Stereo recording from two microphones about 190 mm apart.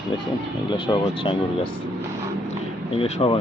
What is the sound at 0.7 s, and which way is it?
Speech, 25° left (ahead or behind).